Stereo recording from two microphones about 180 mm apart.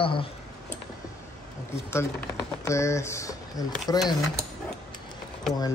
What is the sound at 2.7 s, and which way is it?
Speech, 15° left (ahead or behind).